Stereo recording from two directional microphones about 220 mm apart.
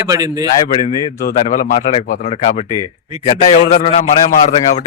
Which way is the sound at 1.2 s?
40° left (ahead or behind).